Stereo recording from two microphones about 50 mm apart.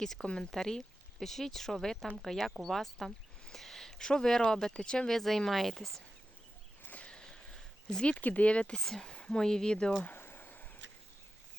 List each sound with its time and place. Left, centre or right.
0.0 s speech: centre
7.0 s a sound: centre
8.1 s speech: left
8.8 s speech: centre
9.0 s speech: centre
10.1 s a sound: left